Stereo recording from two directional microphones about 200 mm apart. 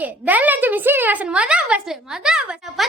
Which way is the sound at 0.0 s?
10° right (ahead or behind).